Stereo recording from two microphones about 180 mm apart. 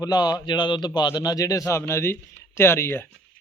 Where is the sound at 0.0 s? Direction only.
25° left (ahead or behind).